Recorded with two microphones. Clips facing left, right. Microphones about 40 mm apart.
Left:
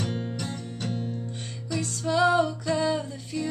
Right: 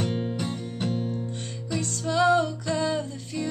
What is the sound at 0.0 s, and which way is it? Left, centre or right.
Music, centre.